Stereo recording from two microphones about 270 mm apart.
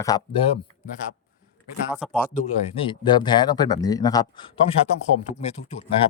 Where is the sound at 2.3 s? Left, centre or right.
Left.